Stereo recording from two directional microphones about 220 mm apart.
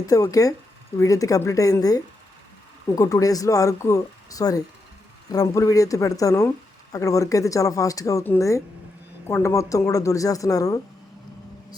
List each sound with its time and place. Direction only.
0.0 s speech: 15° left (ahead or behind)